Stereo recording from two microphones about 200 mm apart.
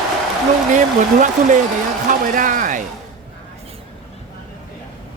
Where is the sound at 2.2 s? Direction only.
40° right (ahead or behind).